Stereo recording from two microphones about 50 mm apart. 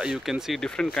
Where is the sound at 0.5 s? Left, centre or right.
Centre.